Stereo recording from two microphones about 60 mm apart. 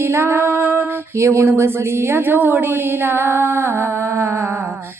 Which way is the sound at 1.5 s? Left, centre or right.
Right.